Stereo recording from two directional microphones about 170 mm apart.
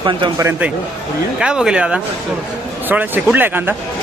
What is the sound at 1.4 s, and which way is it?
Speech, 5° right (ahead or behind).